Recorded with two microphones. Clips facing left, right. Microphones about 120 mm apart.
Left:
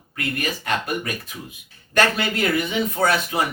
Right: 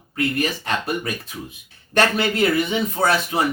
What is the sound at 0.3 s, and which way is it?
Speech, 35° right (ahead or behind).